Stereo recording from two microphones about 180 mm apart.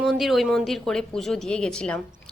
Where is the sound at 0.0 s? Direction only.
Centre (ahead or behind).